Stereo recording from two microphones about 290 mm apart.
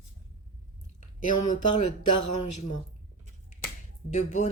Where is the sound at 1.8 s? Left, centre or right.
Left.